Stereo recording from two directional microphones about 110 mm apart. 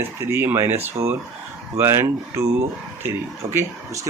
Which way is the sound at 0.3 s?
25° right (ahead or behind).